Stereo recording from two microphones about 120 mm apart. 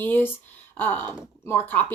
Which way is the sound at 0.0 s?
15° left (ahead or behind).